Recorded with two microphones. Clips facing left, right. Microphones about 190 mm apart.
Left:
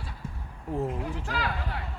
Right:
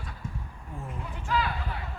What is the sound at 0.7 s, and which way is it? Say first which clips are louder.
Speech: left 9 dB; 65° left (ahead or behind).